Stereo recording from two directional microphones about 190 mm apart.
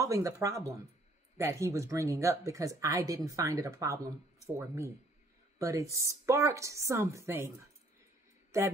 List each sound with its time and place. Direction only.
0.0 s speech: 15° right (ahead or behind)